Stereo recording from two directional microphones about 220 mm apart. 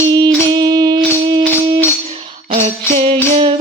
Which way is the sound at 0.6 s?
20° right (ahead or behind).